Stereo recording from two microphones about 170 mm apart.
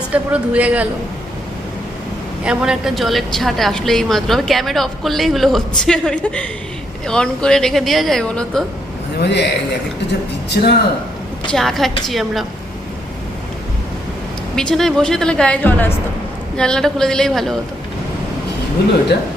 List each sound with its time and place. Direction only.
0.1 s a man's voice: 10° right (ahead or behind)
2.4 s a woman's voice: 5° right (ahead or behind)
9.2 s a man's voice: 90° left
10.5 s speech: 75° left (ahead or behind)
11.5 s a woman's voice: centre (ahead or behind)
14.5 s a woman's voice: 5° left (ahead or behind)